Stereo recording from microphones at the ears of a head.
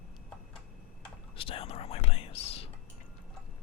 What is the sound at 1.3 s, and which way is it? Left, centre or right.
Whispering, left.